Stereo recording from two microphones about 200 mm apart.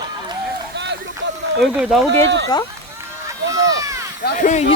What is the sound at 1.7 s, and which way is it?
Speech, 5° right (ahead or behind).